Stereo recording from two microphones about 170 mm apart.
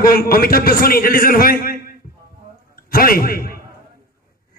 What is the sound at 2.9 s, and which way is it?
Speech, 60° left (ahead or behind).